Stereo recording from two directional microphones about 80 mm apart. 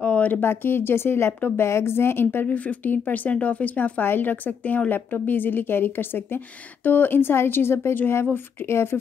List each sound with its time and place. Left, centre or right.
0.0 s speech: centre